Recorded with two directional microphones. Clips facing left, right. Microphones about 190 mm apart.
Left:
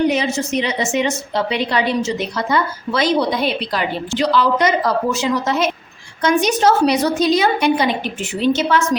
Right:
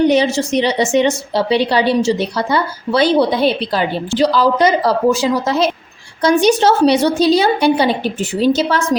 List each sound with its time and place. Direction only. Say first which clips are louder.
0.3 s a woman's voice: right 5 dB; 35° right (ahead or behind)